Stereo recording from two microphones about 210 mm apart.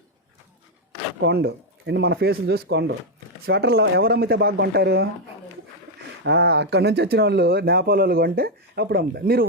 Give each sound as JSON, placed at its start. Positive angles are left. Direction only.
{"t": 1.2, "sound": "speech", "side_deg": -55}
{"t": 6.2, "sound": "speech", "side_deg": -50}